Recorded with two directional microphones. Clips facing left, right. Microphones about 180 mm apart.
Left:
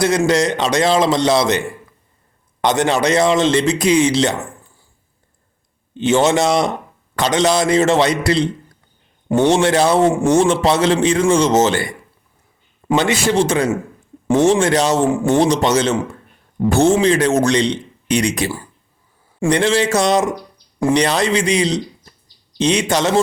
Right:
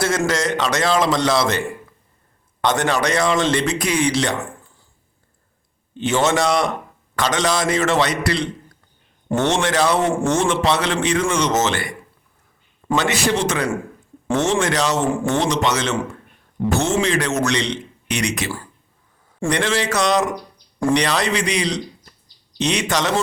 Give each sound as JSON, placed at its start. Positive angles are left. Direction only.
{"t": 0.3, "sound": "a man's voice", "side_deg": 20}
{"t": 6.0, "sound": "a man's voice", "side_deg": 25}
{"t": 9.5, "sound": "a man's voice", "side_deg": 30}
{"t": 12.9, "sound": "a man's voice", "side_deg": 25}